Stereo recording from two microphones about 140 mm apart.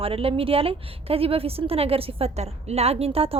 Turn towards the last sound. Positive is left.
turn(degrees=-45)  # may be behind; listen again after turning